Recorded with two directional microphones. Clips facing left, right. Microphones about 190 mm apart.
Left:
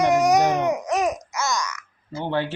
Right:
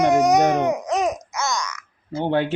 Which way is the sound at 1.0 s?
5° left (ahead or behind).